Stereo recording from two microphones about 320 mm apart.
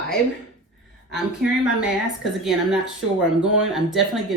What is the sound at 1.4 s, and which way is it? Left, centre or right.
Speech, centre.